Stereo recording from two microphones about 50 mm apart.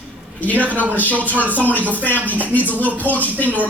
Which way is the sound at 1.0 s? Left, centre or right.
Left.